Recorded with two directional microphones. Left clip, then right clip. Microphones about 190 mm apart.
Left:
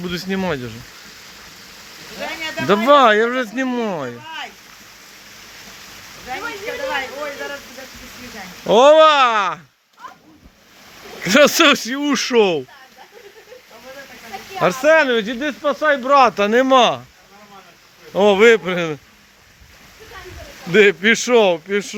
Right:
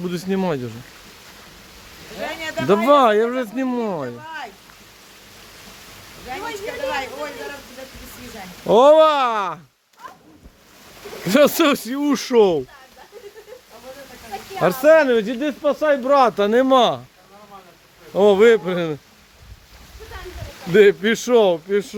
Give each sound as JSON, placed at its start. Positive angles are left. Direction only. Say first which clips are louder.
{"t": 0.0, "sound": "speech", "louder": "even", "side_deg": -15}
{"t": 2.2, "sound": "a sound", "louder": "left 1 dB", "side_deg": -35}
{"t": 2.9, "sound": "speech", "louder": "left 3 dB", "side_deg": -10}
{"t": 8.6, "sound": "speech", "louder": "left 2 dB", "side_deg": -10}
{"t": 11.2, "sound": "speech", "louder": "left 3 dB", "side_deg": -10}
{"t": 14.6, "sound": "speech", "louder": "even", "side_deg": -25}
{"t": 18.1, "sound": "speech", "louder": "left 1 dB", "side_deg": -5}
{"t": 20.7, "sound": "speech", "louder": "left 1 dB", "side_deg": -10}